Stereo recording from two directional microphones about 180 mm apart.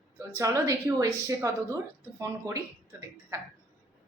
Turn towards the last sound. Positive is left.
turn(degrees=-15)  # may be behind; listen again after turning